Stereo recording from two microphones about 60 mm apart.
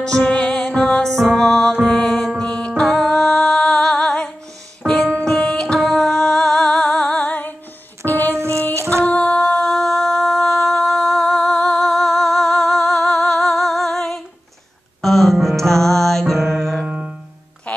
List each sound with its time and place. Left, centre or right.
0.0 s music: centre
2.1 s music: centre
2.4 s music: centre
6.9 s music: left
8.4 s a sound: right
8.7 s music: right
9.0 s music: left
9.5 s a sound: centre
15.0 s music: centre
16.8 s music: centre
17.7 s music: left